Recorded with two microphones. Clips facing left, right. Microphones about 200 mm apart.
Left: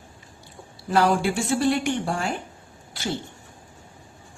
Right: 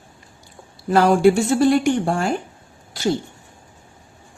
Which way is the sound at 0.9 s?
50° right (ahead or behind).